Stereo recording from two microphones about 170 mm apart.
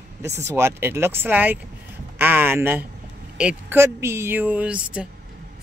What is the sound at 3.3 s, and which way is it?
Speech, 10° right (ahead or behind).